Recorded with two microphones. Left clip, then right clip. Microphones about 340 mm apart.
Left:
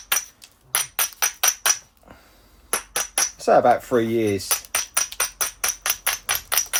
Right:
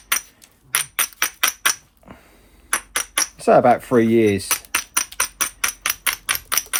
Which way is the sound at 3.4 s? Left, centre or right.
Right.